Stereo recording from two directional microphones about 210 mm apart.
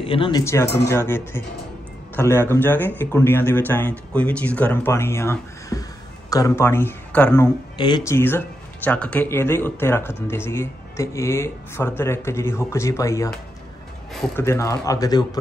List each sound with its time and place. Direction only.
0.0 s speech: 25° left (ahead or behind)
0.8 s speech: 10° left (ahead or behind)
7.7 s speech: 20° left (ahead or behind)
14.3 s speech: 15° left (ahead or behind)